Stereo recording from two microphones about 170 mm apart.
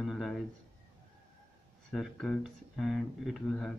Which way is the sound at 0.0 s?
Centre (ahead or behind).